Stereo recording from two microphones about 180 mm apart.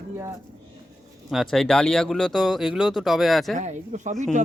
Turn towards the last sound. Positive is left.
turn(degrees=-40)  # may be behind; listen again after turning